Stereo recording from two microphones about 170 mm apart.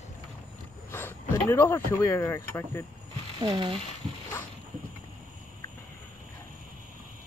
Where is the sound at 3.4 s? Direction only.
30° right (ahead or behind).